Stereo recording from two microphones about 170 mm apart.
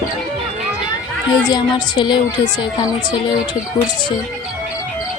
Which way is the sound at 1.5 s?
25° left (ahead or behind).